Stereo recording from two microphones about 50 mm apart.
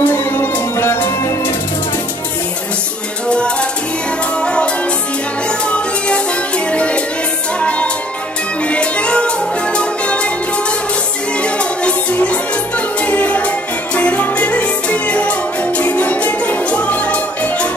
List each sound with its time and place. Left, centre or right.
0.0 s music: left
3.3 s music: left
5.7 s music: left
8.6 s music: left
11.4 s music: left